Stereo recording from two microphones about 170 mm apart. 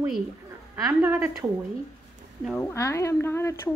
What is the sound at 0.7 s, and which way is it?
Speech, 15° right (ahead or behind).